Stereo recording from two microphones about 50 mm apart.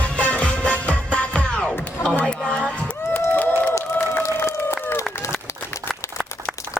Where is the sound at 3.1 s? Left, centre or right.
Left.